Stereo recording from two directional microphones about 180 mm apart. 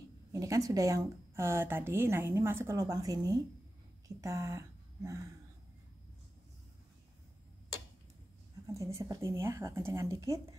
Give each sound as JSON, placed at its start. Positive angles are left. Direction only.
{"t": 0.3, "sound": "a woman's voice", "side_deg": -20}
{"t": 8.6, "sound": "a woman's voice", "side_deg": -15}